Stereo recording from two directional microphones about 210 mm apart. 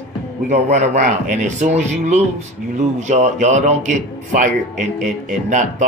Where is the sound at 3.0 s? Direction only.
35° right (ahead or behind).